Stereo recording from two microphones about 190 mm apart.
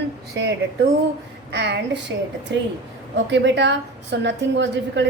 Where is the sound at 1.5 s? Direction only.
70° right (ahead or behind).